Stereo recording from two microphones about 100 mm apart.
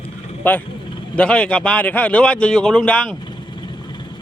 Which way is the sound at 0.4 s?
20° left (ahead or behind).